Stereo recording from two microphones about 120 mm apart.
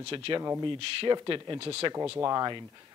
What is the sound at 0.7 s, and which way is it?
Speech, 50° right (ahead or behind).